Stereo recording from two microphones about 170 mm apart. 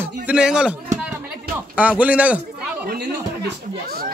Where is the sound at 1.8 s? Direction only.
10° right (ahead or behind).